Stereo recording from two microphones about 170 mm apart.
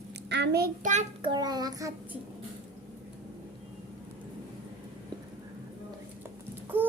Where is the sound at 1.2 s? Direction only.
25° right (ahead or behind).